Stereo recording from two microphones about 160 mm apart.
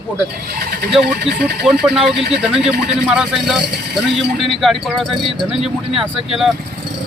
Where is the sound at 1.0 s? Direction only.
80° right.